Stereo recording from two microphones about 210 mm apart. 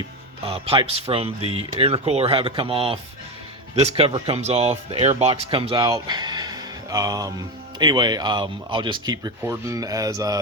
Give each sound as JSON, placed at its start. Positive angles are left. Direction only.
{"t": 0.4, "sound": "speech", "side_deg": -25}